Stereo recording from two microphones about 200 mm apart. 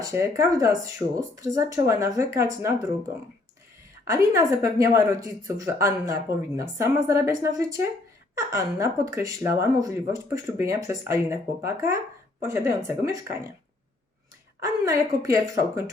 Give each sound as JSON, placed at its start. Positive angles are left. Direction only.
{"t": 0.0, "sound": "a woman's voice", "side_deg": -15}
{"t": 4.0, "sound": "a woman's voice", "side_deg": -15}
{"t": 14.6, "sound": "a woman's voice", "side_deg": -15}